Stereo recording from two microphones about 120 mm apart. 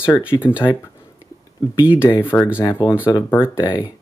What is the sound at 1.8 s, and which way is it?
Speech, 10° right (ahead or behind).